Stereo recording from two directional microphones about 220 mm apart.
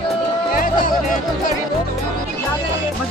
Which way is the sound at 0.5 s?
40° left (ahead or behind).